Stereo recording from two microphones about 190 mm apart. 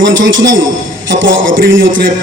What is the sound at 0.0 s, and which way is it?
A man's voice, 80° right.